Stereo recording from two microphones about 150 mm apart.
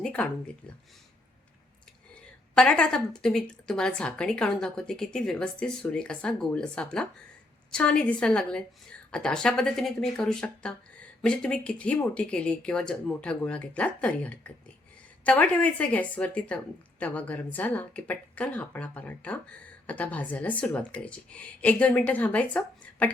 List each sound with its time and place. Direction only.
0.0 s a woman's voice: 5° left (ahead or behind)
2.6 s a woman's voice: 5° left (ahead or behind)